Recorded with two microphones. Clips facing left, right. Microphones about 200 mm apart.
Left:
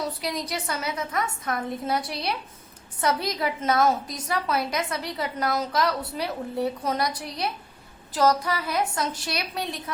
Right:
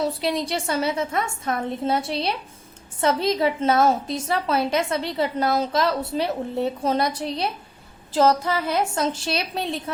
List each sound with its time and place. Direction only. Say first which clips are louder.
0.0 s a woman's voice: right 6 dB; 30° right (ahead or behind)